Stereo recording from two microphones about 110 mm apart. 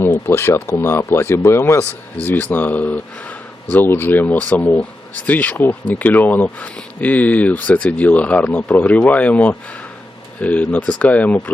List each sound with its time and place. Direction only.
0.0 s speech: 20° left (ahead or behind)